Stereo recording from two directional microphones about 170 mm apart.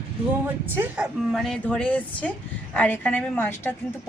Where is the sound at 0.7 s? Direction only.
10° right (ahead or behind).